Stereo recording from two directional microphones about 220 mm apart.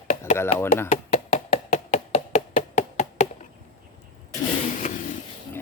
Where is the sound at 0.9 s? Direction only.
30° left (ahead or behind).